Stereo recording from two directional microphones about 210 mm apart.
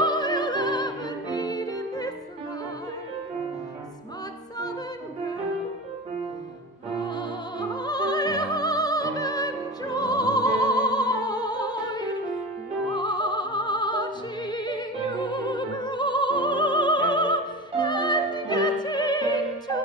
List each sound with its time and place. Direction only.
0.0 s music: 20° left (ahead or behind)
6.9 s music: 20° left (ahead or behind)
12.9 s opera: 20° left (ahead or behind)